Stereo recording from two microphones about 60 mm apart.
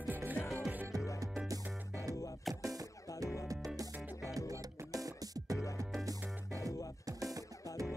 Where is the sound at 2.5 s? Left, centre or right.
Right.